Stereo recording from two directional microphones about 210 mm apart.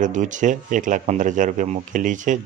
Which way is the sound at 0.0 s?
35° right (ahead or behind).